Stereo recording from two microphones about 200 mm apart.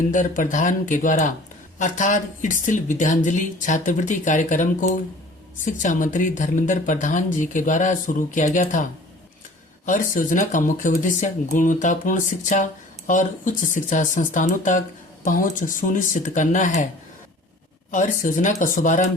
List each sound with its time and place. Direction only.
0.1 s speech: 40° left (ahead or behind)
17.9 s speech: 40° left (ahead or behind)